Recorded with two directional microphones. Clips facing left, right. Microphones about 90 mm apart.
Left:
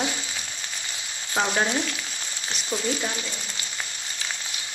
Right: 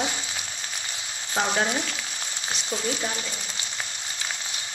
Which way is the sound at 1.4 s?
5° right (ahead or behind).